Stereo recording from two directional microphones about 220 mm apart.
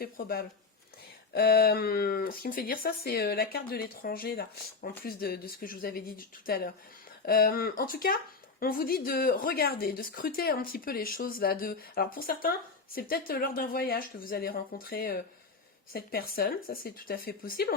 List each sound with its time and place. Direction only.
0.0 s speech: 45° left (ahead or behind)